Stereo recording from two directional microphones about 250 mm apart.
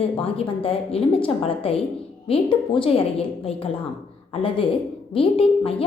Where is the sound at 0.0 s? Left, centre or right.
Left.